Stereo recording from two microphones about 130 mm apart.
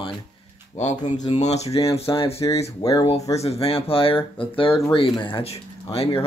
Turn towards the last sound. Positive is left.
turn(degrees=50)  # may be behind; listen again after turning